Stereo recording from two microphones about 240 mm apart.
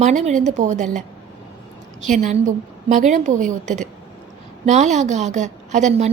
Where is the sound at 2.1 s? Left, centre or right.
Right.